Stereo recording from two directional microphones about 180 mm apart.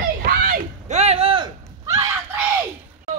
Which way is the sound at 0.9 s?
35° right (ahead or behind).